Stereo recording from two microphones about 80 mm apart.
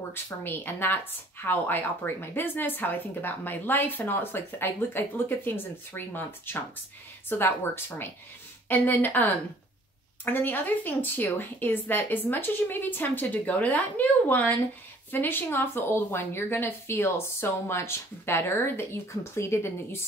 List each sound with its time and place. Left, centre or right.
0.1 s a woman's voice: left